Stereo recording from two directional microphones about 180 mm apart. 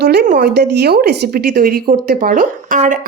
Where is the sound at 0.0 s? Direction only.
65° right (ahead or behind).